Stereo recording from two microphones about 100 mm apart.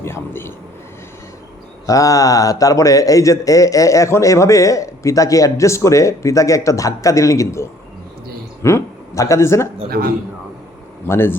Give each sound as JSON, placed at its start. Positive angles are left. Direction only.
{"t": 0.0, "sound": "speech", "side_deg": 25}
{"t": 1.9, "sound": "a man's voice", "side_deg": 35}
{"t": 11.1, "sound": "speech", "side_deg": 25}